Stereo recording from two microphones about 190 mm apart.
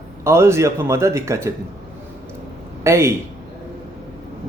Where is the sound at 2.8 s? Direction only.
15° right (ahead or behind).